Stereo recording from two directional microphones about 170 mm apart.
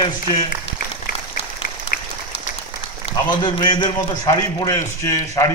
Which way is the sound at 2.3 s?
40° left (ahead or behind).